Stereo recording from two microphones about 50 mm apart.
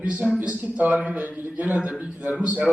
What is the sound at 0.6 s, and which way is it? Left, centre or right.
A man's voice, right.